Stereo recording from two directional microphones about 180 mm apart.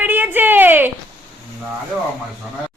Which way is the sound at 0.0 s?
10° right (ahead or behind).